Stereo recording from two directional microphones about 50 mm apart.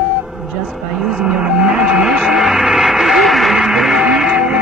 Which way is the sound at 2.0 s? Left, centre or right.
Centre.